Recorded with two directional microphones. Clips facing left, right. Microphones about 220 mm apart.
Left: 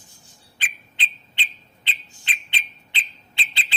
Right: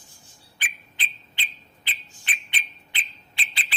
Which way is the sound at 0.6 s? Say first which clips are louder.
Left 2 dB; 25° left (ahead or behind).